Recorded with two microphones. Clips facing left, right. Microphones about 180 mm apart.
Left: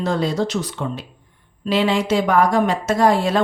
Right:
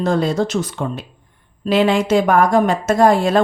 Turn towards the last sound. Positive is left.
turn(degrees=-50)  # may be behind; listen again after turning